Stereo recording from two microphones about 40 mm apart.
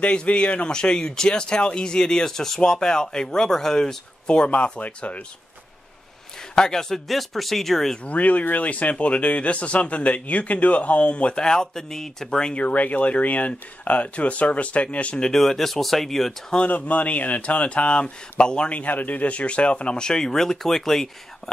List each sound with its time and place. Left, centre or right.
0.0 s speech: left
4.4 s speech: left
6.5 s speech: centre
7.1 s speech: centre
8.0 s speech: left; by 12.5 s centre
12.5 s speech: left
15.3 s speech: centre
16.5 s speech: left
18.7 s speech: left; by 21.1 s centre